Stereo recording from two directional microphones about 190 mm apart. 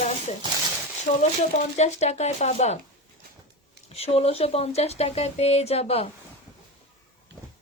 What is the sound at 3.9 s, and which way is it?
Speech, 30° left (ahead or behind).